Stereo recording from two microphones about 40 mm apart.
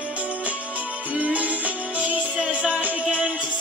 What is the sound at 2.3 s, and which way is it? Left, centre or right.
Music, right.